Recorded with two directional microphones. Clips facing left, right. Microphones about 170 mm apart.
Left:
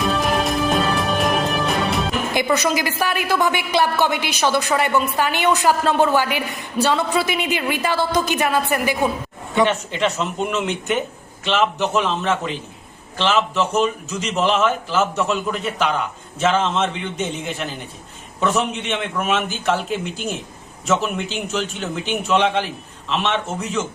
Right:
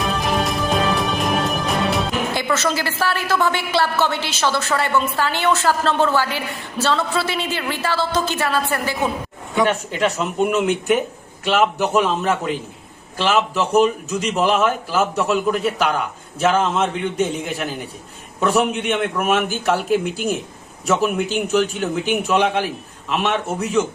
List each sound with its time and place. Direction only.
0.2 s music: centre (ahead or behind)
2.3 s a woman's voice: 15° left (ahead or behind)
9.6 s a man's voice: 5° right (ahead or behind)